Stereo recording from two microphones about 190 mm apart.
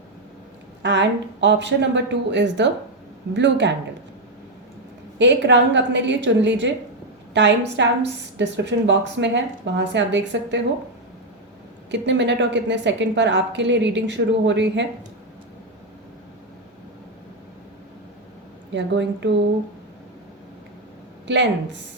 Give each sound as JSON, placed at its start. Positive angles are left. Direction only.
{"t": 0.8, "sound": "a woman's voice", "side_deg": -70}
{"t": 5.1, "sound": "a woman's voice", "side_deg": -70}
{"t": 11.9, "sound": "a woman's voice", "side_deg": -70}
{"t": 18.7, "sound": "a woman's voice", "side_deg": -70}
{"t": 21.3, "sound": "a woman's voice", "side_deg": -70}